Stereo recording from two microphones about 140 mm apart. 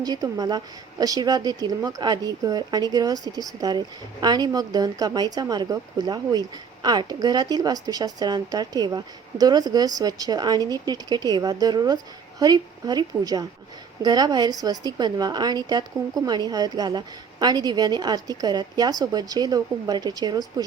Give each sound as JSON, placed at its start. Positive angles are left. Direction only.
{"t": 0.0, "sound": "a woman's voice", "side_deg": -30}